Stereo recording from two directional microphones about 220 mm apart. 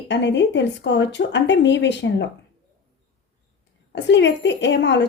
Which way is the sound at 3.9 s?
55° left (ahead or behind).